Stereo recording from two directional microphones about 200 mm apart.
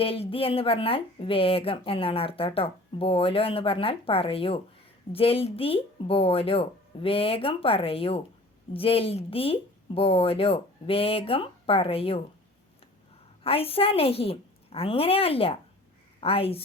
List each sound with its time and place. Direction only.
0.0 s speech: 25° left (ahead or behind)
13.4 s speech: 30° left (ahead or behind)